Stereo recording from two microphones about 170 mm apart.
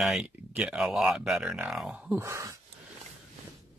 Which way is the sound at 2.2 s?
15° right (ahead or behind).